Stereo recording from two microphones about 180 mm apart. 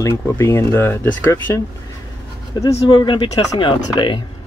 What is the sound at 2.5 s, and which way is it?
Speech, 20° left (ahead or behind).